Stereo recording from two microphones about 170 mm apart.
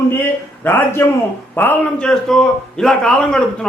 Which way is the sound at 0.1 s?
10° left (ahead or behind).